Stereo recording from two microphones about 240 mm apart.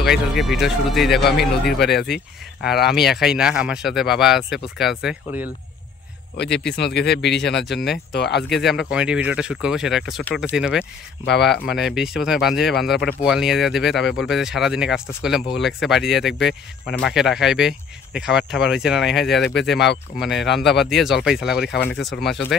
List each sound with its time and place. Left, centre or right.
0.0 s speech: centre
1.8 s speech: left
2.9 s speech: centre
6.3 s speech: left
8.5 s speech: centre